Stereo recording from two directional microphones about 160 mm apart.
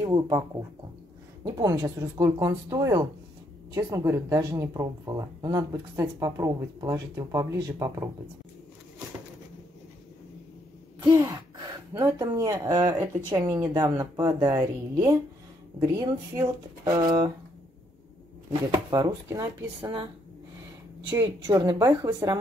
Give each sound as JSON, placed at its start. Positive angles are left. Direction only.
{"t": 0.0, "sound": "speech", "side_deg": -20}
{"t": 11.2, "sound": "speech", "side_deg": -25}
{"t": 18.7, "sound": "speech", "side_deg": -25}
{"t": 21.1, "sound": "speech", "side_deg": -20}